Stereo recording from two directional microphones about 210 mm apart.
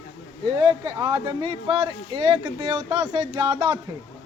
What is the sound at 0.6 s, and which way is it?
Speech, 20° right (ahead or behind).